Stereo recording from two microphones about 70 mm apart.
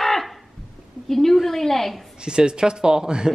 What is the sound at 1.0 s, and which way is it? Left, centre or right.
Speech, centre.